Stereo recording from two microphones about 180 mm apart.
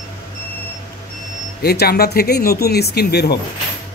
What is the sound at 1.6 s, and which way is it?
Speech, 60° left (ahead or behind).